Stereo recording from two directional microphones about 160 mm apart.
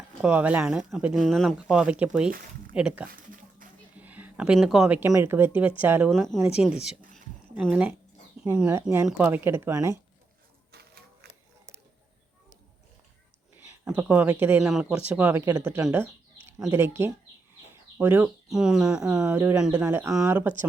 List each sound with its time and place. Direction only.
0.2 s speech: 10° right (ahead or behind)
6.1 s speech: centre (ahead or behind); by 10.0 s 15° right (ahead or behind)
10.7 s a sound: 80° right
13.8 s speech: 10° right (ahead or behind)